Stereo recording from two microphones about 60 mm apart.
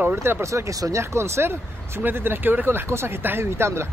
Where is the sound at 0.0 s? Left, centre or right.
Right.